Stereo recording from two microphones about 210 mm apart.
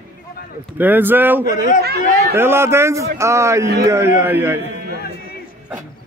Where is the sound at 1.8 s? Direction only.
50° right (ahead or behind).